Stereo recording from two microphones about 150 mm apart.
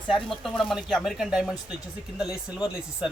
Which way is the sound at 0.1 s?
Centre (ahead or behind).